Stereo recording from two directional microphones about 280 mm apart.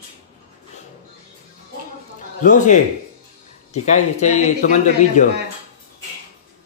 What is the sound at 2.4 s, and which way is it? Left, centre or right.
Speech, left.